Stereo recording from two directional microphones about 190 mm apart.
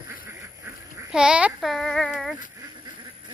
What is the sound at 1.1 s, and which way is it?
A child's voice, 5° right (ahead or behind).